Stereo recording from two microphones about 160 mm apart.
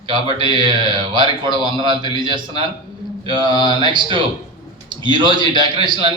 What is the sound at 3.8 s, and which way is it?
A man's voice, 30° right (ahead or behind).